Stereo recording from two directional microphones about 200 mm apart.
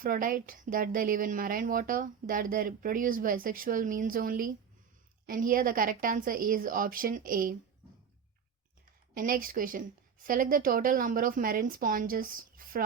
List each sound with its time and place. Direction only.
0.0 s a woman's voice: 45° right (ahead or behind)
9.1 s a woman's voice: 45° right (ahead or behind)